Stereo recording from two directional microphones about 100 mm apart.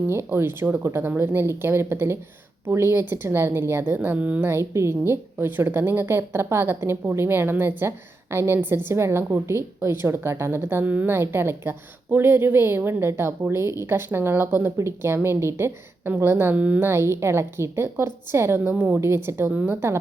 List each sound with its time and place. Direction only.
0.1 s a woman's voice: 25° right (ahead or behind)
16.9 s a woman's voice: 25° right (ahead or behind)
18.7 s a woman's voice: 10° right (ahead or behind)
18.9 s a woman's voice: 25° right (ahead or behind)